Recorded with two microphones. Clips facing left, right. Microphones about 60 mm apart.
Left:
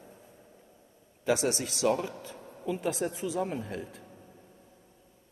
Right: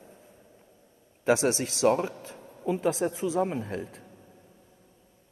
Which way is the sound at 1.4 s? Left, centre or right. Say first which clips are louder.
Right 4 dB; right.